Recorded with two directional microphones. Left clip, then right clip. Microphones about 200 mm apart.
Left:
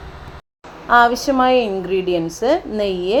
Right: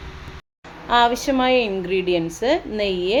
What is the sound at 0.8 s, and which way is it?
A woman's voice, 5° left (ahead or behind).